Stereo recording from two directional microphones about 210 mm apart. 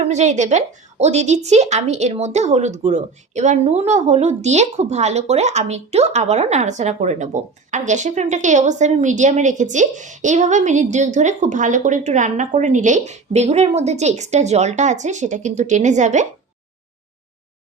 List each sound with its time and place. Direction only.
0.0 s a woman's voice: 35° right (ahead or behind)